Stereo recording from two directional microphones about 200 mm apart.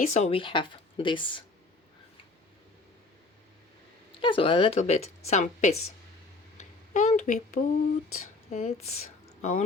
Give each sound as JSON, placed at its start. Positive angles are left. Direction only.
{"t": 0.1, "sound": "speech", "side_deg": 30}
{"t": 4.2, "sound": "a woman's voice", "side_deg": 25}